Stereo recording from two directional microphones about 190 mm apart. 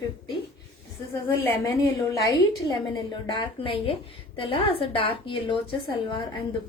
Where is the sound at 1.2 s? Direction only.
15° left (ahead or behind).